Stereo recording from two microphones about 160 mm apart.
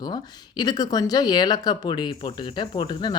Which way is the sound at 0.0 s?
25° left (ahead or behind).